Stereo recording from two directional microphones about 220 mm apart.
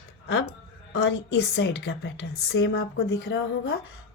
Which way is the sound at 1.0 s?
50° left (ahead or behind).